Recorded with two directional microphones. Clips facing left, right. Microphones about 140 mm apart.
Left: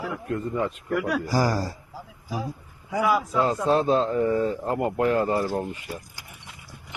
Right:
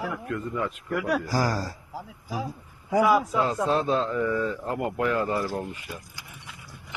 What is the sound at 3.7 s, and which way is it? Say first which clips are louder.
Speech: left 6 dB; 30° left (ahead or behind).